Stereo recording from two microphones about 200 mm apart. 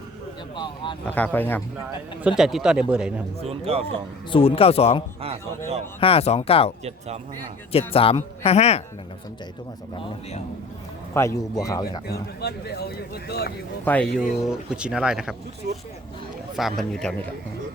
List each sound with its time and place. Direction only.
0.5 s speech: 25° left (ahead or behind)
1.1 s speech: 10° left (ahead or behind)
2.2 s speech: 5° right (ahead or behind)
3.4 s speech: 30° right (ahead or behind)
4.3 s speech: 30° left (ahead or behind)
5.2 s speech: 30° right (ahead or behind)
6.0 s speech: 30° left (ahead or behind)
11.1 s speech: 15° left (ahead or behind)
12.4 s speech: 55° left (ahead or behind)
13.8 s speech: 5° left (ahead or behind)
14.4 s speech: 5° right (ahead or behind)
16.6 s speech: centre (ahead or behind)